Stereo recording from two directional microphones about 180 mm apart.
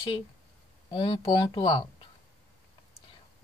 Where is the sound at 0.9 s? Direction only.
30° left (ahead or behind).